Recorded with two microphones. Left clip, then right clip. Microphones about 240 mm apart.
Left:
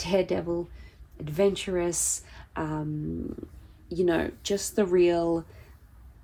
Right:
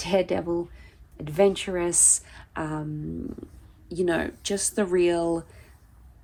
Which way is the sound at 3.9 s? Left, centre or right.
Right.